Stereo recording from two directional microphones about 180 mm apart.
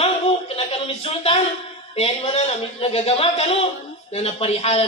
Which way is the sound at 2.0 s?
35° left (ahead or behind).